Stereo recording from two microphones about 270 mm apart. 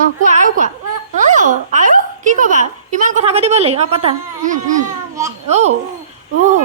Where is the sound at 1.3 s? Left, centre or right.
Right.